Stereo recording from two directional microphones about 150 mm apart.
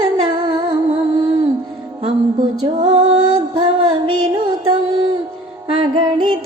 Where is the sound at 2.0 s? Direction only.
30° right (ahead or behind).